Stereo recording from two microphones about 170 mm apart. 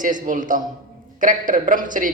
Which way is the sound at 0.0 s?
50° right (ahead or behind).